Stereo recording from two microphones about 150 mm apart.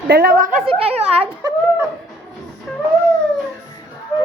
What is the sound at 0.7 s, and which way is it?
Speech, 40° right (ahead or behind).